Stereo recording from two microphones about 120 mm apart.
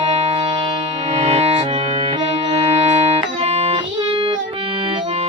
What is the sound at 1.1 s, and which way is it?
Music, 65° right (ahead or behind).